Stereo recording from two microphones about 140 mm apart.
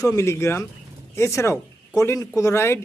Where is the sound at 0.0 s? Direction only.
20° left (ahead or behind).